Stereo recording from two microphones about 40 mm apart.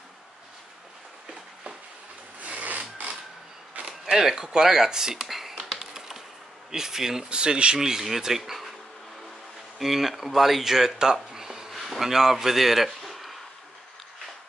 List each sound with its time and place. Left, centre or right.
2.4 s filing: right
4.0 s speech: centre
5.8 s typing: centre
6.7 s speech: centre
7.2 s speech: right
7.8 s speech: centre
9.8 s speech: centre
11.3 s a sound: centre
11.7 s speech: centre